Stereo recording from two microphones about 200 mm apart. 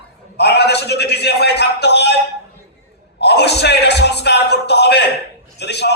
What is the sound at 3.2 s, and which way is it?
A man's voice, 55° left (ahead or behind).